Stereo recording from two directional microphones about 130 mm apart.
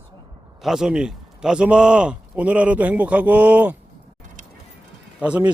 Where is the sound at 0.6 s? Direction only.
5° right (ahead or behind).